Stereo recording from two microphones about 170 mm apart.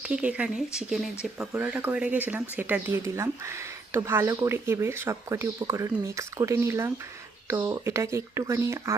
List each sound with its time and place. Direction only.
0.0 s speech: 5° right (ahead or behind)